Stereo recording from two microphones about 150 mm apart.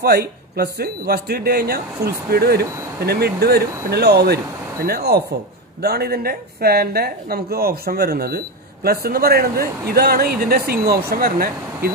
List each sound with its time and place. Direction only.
0.0 s speech: 90° right